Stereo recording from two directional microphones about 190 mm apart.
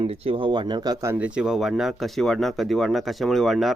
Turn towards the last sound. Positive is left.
turn(degrees=0)  # may be behind; listen again after turning